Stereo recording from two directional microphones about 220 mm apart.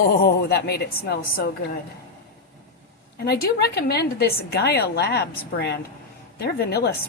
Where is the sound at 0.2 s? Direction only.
45° left (ahead or behind).